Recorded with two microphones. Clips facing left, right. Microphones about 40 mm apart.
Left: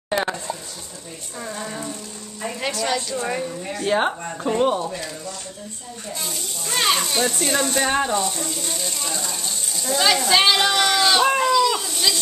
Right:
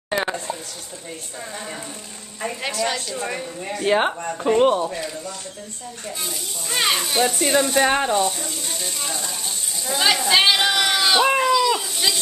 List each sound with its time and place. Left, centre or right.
0.1 s a sound: centre
1.5 s speech: centre
2.6 s a woman's voice: centre
3.8 s speech: centre
4.7 s speech: centre
8.1 s a sound: centre